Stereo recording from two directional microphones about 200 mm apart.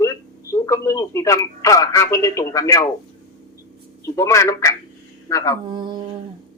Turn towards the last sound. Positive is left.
turn(degrees=-20)  # may be behind; listen again after turning